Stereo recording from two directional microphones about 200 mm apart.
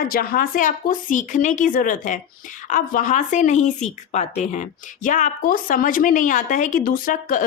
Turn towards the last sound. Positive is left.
turn(degrees=45)  # may be behind; listen again after turning